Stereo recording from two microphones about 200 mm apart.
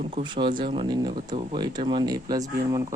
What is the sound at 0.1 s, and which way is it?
Speech, 25° right (ahead or behind).